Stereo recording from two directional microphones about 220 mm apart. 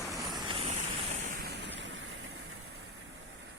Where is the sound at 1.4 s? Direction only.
50° right (ahead or behind).